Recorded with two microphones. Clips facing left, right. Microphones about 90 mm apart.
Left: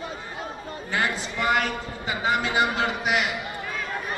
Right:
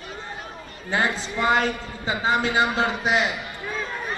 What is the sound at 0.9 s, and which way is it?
A man's voice, 25° right (ahead or behind).